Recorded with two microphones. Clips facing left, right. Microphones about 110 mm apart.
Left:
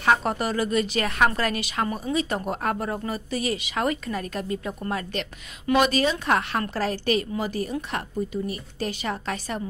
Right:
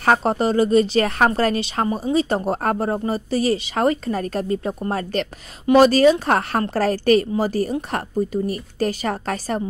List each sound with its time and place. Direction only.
0.0 s speech: 45° right (ahead or behind)
0.3 s a woman's voice: 30° right (ahead or behind)